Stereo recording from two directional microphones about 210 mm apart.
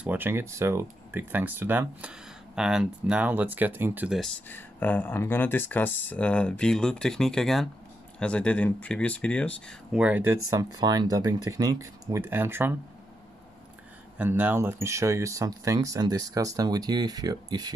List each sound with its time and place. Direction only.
0.0 s speech: 10° right (ahead or behind)
4.5 s speech: 10° left (ahead or behind); by 12.7 s 10° right (ahead or behind)
14.1 s speech: 10° right (ahead or behind)